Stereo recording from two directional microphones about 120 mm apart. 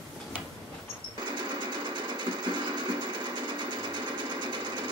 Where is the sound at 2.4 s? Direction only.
40° right (ahead or behind).